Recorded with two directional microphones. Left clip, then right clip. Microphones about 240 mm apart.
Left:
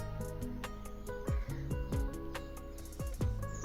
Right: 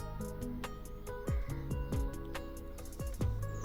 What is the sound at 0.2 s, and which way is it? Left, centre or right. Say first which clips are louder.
Music: right 2 dB; centre.